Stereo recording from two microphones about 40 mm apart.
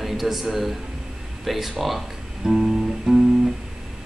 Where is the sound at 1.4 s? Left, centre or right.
Centre.